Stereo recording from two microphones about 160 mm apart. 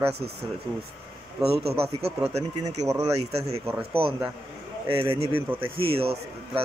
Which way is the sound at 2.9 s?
20° right (ahead or behind).